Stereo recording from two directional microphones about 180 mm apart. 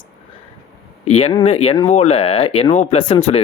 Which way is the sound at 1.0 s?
35° left (ahead or behind).